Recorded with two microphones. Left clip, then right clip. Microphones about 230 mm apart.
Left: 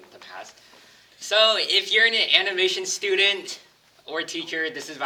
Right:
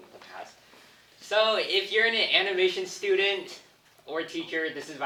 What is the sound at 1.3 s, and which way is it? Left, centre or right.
Speech, left.